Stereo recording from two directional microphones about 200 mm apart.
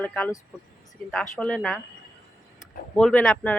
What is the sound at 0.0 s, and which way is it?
Speech, 5° left (ahead or behind).